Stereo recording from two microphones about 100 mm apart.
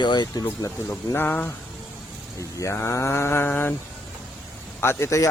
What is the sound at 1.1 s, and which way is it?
Speech, 20° left (ahead or behind).